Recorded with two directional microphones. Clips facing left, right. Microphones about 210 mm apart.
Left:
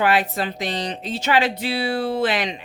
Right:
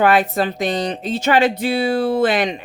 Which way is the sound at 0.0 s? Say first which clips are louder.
Right 5 dB; 45° right (ahead or behind).